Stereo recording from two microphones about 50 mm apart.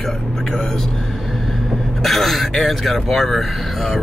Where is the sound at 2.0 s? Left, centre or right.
Centre.